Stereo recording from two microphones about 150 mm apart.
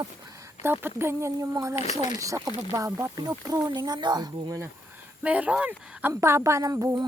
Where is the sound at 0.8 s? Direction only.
15° right (ahead or behind).